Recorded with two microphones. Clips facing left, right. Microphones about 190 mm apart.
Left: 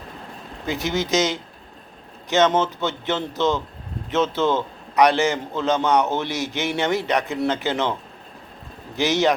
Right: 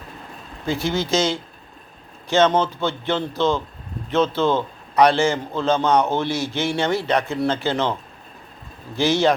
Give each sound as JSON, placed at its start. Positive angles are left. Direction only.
{"t": 0.6, "sound": "speech", "side_deg": 15}
{"t": 4.4, "sound": "a man's voice", "side_deg": -15}
{"t": 4.9, "sound": "speech", "side_deg": 15}
{"t": 9.0, "sound": "speech", "side_deg": 15}